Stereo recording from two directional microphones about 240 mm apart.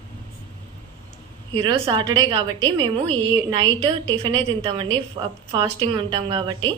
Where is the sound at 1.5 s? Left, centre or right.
Right.